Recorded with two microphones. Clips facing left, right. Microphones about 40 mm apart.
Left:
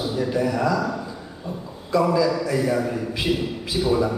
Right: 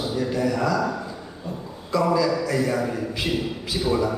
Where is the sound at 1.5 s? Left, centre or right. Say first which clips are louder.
Left 1 dB; centre.